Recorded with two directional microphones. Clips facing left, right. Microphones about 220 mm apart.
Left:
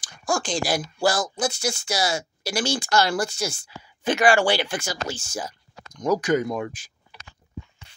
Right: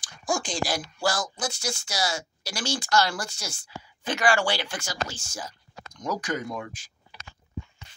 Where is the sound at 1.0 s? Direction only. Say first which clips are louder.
Left 6 dB; 5° left (ahead or behind).